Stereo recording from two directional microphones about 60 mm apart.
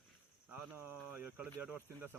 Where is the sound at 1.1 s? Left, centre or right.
Right.